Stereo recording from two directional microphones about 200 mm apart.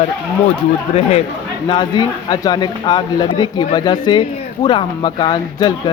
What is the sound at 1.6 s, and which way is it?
Speech, 20° left (ahead or behind).